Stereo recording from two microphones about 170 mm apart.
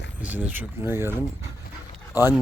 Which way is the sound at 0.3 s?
10° right (ahead or behind).